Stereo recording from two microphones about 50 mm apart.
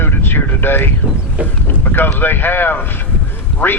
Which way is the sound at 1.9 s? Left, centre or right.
Left.